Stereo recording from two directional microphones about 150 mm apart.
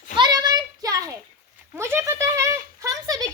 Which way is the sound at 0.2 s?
25° right (ahead or behind).